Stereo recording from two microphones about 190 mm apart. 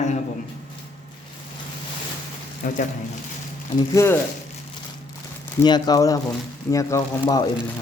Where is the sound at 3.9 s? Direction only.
15° left (ahead or behind).